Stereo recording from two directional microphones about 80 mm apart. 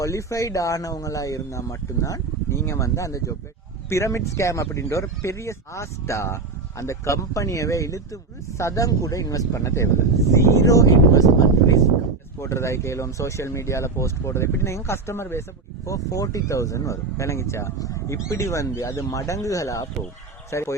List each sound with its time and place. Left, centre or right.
0.0 s speech: left
12.4 s speech: left
15.9 s speech: left